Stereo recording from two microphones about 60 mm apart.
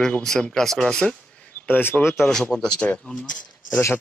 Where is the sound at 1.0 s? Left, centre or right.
Left.